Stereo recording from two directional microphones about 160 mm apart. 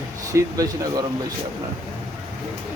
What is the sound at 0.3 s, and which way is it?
Speech, 20° right (ahead or behind).